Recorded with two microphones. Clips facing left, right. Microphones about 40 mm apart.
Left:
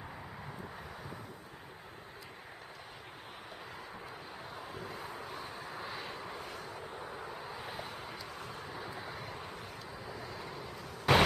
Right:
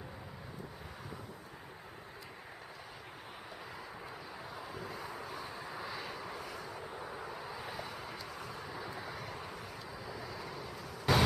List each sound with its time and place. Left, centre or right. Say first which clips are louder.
4.6 s vehicle: even; left
5.5 s vehicle: even; centre
6.4 s vehicle: even; left
6.7 s vehicle: even; centre
8.4 s vehicle: even; left
8.6 s vehicle: even; centre
10.5 s vehicle: even; left
11.1 s vehicle: left 4 dB; left